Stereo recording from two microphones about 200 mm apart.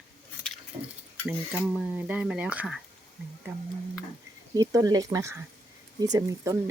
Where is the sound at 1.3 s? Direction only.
5° right (ahead or behind).